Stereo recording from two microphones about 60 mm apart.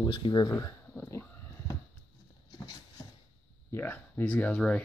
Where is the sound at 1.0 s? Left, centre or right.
Left.